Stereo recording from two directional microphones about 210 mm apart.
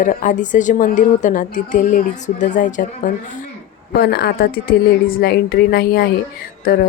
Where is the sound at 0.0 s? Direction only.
40° left (ahead or behind).